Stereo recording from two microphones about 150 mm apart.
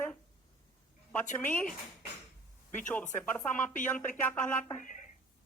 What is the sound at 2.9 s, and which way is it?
A man's voice, 10° left (ahead or behind).